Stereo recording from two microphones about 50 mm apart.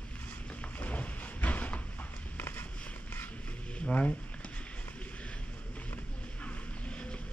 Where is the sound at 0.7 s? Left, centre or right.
Left.